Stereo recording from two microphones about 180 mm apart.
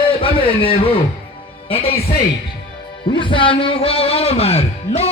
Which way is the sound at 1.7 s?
30° left (ahead or behind).